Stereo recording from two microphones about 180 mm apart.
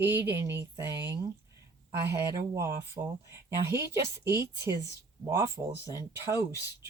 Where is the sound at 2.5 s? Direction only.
15° right (ahead or behind).